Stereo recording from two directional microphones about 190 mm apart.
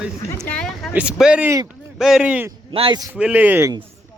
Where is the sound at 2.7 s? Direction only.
25° right (ahead or behind).